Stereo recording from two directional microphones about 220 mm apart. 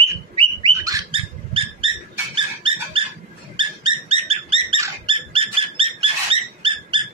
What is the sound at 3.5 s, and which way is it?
Dog, 25° right (ahead or behind).